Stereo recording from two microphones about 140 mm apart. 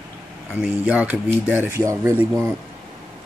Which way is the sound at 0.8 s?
10° right (ahead or behind).